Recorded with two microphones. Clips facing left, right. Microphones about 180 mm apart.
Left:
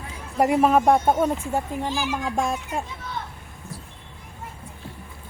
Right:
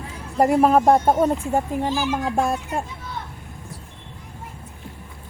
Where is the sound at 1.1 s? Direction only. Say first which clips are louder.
Right 3 dB; 15° right (ahead or behind).